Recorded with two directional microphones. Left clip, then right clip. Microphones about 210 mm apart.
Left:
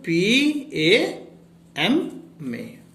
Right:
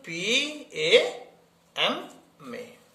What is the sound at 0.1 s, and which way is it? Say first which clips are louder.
Speech: left 7 dB; 30° right (ahead or behind).